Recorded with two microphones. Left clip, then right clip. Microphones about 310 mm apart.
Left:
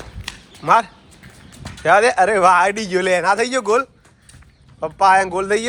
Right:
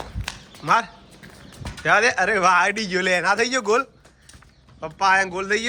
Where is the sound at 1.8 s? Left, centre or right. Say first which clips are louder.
Left 5 dB; centre.